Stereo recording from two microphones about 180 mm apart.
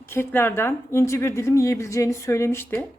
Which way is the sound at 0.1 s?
15° left (ahead or behind).